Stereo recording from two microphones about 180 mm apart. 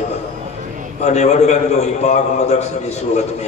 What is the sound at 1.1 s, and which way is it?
A man's voice, 40° left (ahead or behind).